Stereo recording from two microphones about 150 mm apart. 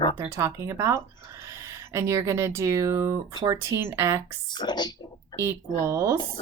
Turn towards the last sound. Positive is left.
turn(degrees=-20)  # may be behind; listen again after turning